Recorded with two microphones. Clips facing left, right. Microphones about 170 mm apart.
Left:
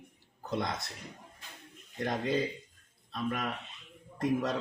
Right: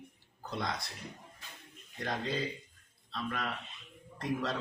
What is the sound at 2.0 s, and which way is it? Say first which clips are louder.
A man's voice: left 4 dB; 20° left (ahead or behind).